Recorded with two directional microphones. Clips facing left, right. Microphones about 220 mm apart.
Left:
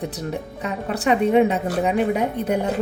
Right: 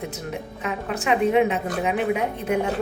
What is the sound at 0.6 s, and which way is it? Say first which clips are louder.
A woman's voice: left 3 dB; 35° left (ahead or behind).